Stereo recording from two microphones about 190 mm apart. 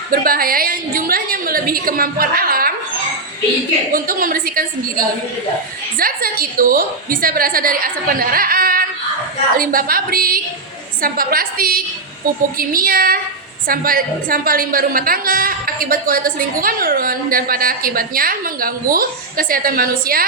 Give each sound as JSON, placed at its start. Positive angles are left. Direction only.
{"t": 0.1, "sound": "a woman's voice", "side_deg": -50}
{"t": 3.9, "sound": "a woman's voice", "side_deg": -50}